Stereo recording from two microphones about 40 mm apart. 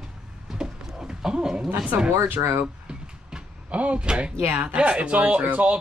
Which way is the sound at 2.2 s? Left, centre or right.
Right.